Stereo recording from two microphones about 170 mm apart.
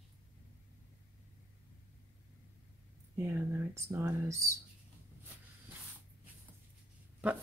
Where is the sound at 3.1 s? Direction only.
15° right (ahead or behind).